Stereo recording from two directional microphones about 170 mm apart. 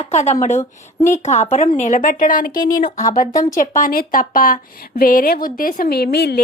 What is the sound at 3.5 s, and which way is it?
A woman's voice, 50° left (ahead or behind).